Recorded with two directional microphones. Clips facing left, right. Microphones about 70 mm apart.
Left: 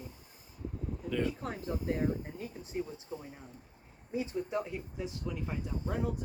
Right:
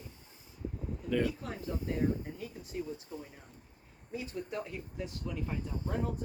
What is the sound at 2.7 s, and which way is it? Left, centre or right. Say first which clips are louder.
Speech: left 2 dB; left.